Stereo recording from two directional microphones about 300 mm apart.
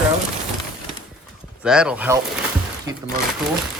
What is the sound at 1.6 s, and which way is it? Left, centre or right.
Speech, centre.